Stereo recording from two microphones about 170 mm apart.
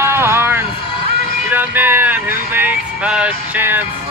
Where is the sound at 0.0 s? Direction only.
15° right (ahead or behind).